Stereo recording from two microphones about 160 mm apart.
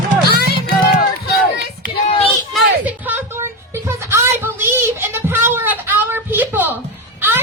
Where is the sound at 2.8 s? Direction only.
10° right (ahead or behind).